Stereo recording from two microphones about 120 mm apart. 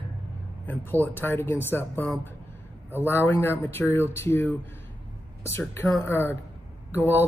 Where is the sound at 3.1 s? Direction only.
20° left (ahead or behind).